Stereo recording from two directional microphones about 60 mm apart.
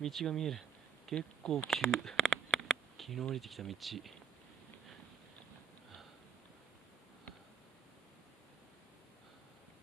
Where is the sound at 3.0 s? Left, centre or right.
Centre.